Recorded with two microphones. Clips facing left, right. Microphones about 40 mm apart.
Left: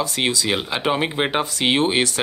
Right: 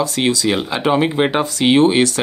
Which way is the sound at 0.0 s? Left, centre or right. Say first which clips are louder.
Right 4 dB; left.